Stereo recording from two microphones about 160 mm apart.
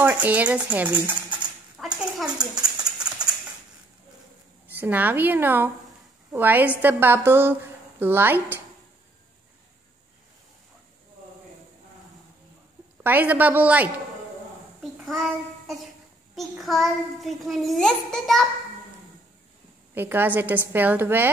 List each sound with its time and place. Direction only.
0.0 s speech: 10° right (ahead or behind)
1.8 s a sound: 5° right (ahead or behind)
4.6 s a woman's voice: 10° right (ahead or behind)
13.0 s a woman's voice: 10° right (ahead or behind)
14.8 s child singing: centre (ahead or behind)
16.3 s a child's voice: centre (ahead or behind)
19.9 s a woman's voice: 15° right (ahead or behind)